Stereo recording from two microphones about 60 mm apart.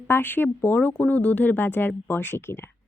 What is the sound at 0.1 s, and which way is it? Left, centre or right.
A woman's voice, left.